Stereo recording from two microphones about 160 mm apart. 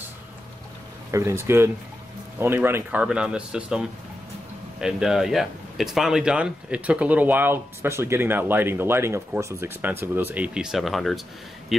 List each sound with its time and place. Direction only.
1.1 s speech: 15° right (ahead or behind); by 11.1 s centre (ahead or behind)